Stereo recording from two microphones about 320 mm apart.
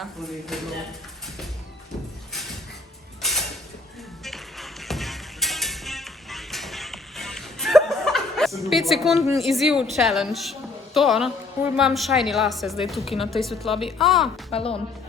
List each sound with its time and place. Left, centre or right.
0.0 s a woman's voice: centre
4.2 s music: centre
9.3 s a woman's voice: centre
14.5 s a woman's voice: centre